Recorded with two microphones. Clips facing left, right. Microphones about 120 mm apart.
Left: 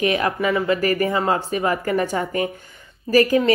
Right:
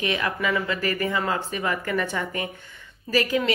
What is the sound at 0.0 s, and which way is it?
A woman's voice, 40° left (ahead or behind).